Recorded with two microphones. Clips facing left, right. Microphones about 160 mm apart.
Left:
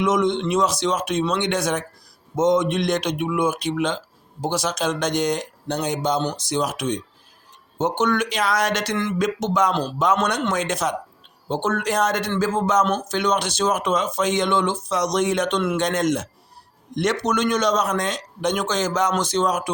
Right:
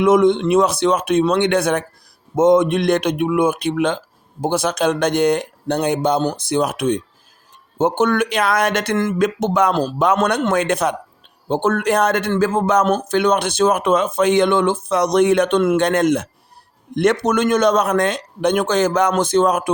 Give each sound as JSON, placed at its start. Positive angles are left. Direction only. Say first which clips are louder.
{"t": 0.0, "sound": "speech", "louder": "right 7 dB", "side_deg": -55}